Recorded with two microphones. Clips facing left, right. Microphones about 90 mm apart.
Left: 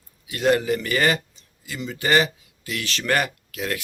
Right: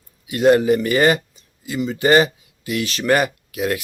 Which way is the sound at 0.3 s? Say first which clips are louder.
Right 6 dB; 20° right (ahead or behind).